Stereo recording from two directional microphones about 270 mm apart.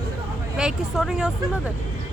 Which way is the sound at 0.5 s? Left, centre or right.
Centre.